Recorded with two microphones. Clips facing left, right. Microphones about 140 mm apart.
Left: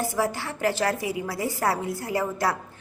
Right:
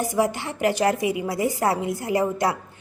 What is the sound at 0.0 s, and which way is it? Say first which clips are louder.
A woman's voice: right 3 dB; 20° right (ahead or behind).